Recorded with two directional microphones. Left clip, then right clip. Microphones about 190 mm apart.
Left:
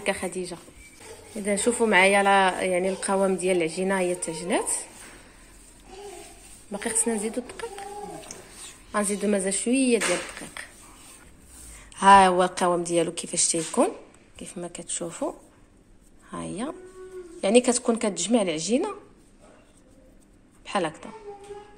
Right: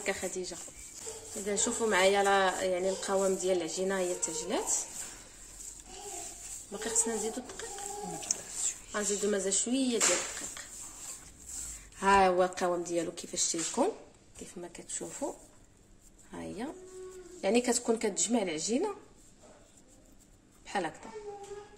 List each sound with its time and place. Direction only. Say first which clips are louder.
0.0 s a woman's voice: left 6 dB; 20° left (ahead or behind)
6.7 s a woman's voice: left 6 dB; 25° left (ahead or behind)
9.2 s a woman's voice: left 5 dB; 20° left (ahead or behind)
10.6 s a sound: left 8 dB; 25° left (ahead or behind)
11.9 s speech: left 10 dB; 15° left (ahead or behind)
20.6 s a sound: left 7 dB; 10° left (ahead or behind)